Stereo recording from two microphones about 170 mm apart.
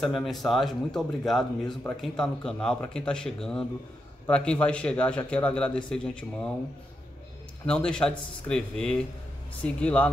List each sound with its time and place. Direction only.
0.0 s a man's voice: centre (ahead or behind)
7.6 s a man's voice: 5° left (ahead or behind)